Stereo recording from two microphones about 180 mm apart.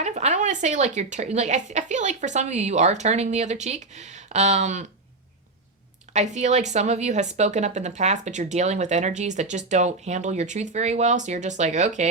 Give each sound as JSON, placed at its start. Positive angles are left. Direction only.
{"t": 0.0, "sound": "a woman's voice", "side_deg": -40}
{"t": 6.1, "sound": "a woman's voice", "side_deg": -40}